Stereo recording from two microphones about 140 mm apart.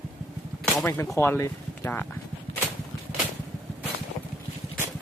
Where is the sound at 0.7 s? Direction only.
20° left (ahead or behind).